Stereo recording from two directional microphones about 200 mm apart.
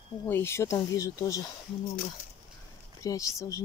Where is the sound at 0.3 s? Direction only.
10° left (ahead or behind).